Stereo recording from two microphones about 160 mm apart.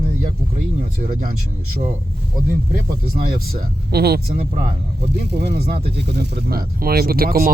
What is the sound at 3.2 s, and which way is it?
Speech, 75° right (ahead or behind).